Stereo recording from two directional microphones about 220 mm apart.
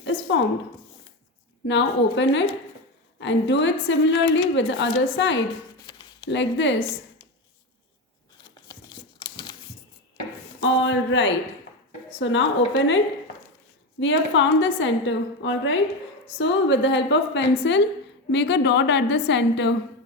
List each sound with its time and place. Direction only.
0.0 s speech: 55° left (ahead or behind)
1.6 s a woman's voice: 55° left (ahead or behind)
5.8 s a sound: 20° left (ahead or behind)
6.2 s speech: 55° left (ahead or behind)
8.4 s a sound: 20° left (ahead or behind)
10.6 s a woman's voice: 55° left (ahead or behind)
14.0 s a woman's voice: 55° left (ahead or behind)